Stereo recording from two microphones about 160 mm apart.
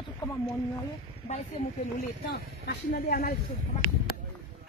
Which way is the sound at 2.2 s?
90° left.